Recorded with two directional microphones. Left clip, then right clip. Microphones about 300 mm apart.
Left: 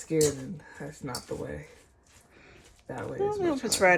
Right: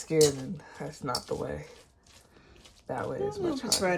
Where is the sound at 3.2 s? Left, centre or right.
Centre.